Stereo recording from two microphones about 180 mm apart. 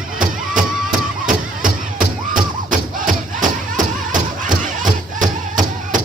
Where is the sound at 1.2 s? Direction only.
50° right (ahead or behind).